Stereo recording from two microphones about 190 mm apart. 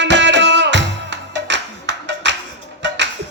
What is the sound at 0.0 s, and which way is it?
Music, 70° right (ahead or behind).